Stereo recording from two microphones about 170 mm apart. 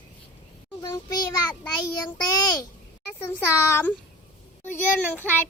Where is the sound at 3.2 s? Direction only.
15° left (ahead or behind).